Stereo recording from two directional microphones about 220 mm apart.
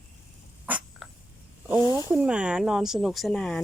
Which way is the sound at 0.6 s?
5° right (ahead or behind).